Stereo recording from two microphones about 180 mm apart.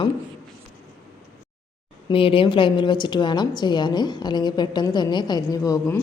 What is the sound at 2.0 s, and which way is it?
A woman's voice, 30° left (ahead or behind).